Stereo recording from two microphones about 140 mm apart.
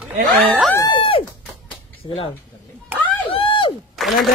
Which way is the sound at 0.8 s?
40° left (ahead or behind).